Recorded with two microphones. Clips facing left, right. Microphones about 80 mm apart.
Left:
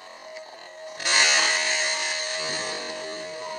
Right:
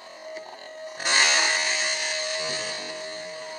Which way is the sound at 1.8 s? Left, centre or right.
Left.